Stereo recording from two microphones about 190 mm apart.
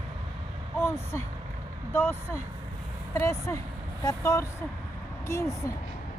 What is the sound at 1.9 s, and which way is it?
Speech, 10° left (ahead or behind).